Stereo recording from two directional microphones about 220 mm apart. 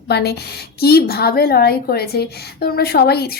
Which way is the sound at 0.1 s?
50° left (ahead or behind).